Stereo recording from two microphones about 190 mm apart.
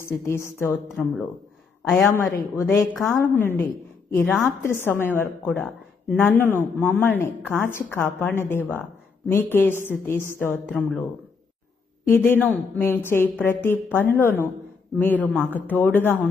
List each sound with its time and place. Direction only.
0.0 s a woman's voice: 15° left (ahead or behind)
2.0 s a woman's voice: 15° left (ahead or behind)
2.9 s a woman's voice: centre (ahead or behind)
3.2 s a woman's voice: 10° left (ahead or behind)
12.0 s a woman's voice: 10° left (ahead or behind)